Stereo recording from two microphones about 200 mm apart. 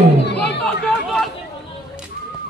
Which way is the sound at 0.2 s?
55° left (ahead or behind).